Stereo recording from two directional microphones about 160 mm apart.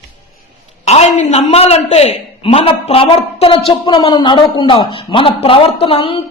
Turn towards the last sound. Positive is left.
turn(degrees=35)  # may be behind; listen again after turning